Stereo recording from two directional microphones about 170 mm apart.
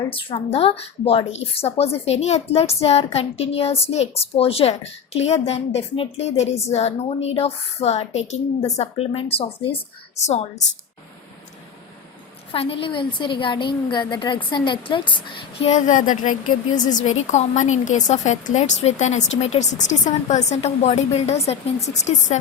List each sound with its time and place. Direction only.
0.1 s a woman's voice: 30° left (ahead or behind)
12.5 s a woman's voice: 35° left (ahead or behind)
15.6 s a woman's voice: 45° left (ahead or behind)